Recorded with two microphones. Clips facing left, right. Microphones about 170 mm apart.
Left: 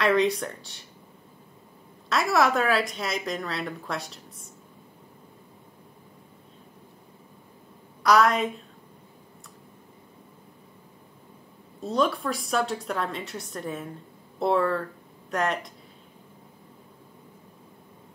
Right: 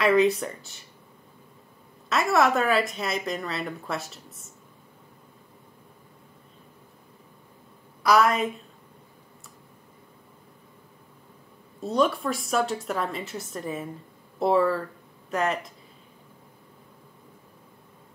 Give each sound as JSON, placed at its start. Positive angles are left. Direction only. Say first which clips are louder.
{"t": 0.0, "sound": "a woman's voice", "louder": "right 2 dB", "side_deg": -5}
{"t": 2.0, "sound": "a woman's voice", "louder": "right 1 dB", "side_deg": 0}
{"t": 8.0, "sound": "a woman's voice", "louder": "even", "side_deg": -5}
{"t": 11.8, "sound": "a woman's voice", "louder": "right 1 dB", "side_deg": 0}